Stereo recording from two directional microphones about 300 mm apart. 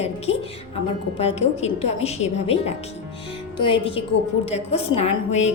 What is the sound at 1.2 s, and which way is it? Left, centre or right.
A woman's voice, left.